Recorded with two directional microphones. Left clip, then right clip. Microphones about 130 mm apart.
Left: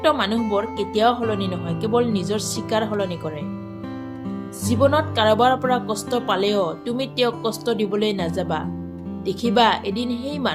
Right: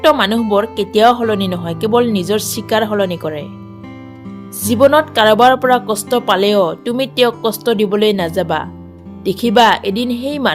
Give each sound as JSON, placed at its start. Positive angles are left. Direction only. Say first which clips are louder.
{"t": 0.0, "sound": "speech", "louder": "right 8 dB", "side_deg": -55}
{"t": 4.6, "sound": "speech", "louder": "right 8 dB", "side_deg": -55}